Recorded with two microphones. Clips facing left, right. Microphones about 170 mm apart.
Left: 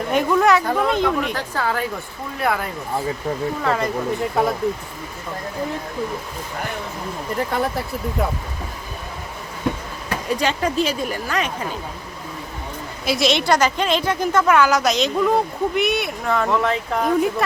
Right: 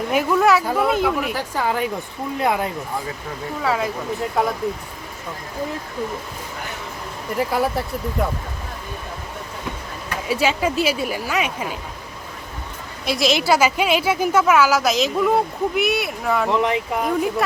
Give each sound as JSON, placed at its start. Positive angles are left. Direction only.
{"t": 0.1, "sound": "speech", "side_deg": -5}
{"t": 3.6, "sound": "a woman's voice", "side_deg": -5}
{"t": 7.3, "sound": "a woman's voice", "side_deg": -5}
{"t": 10.2, "sound": "speech", "side_deg": -5}
{"t": 13.1, "sound": "a woman's voice", "side_deg": 0}
{"t": 16.5, "sound": "speech", "side_deg": -15}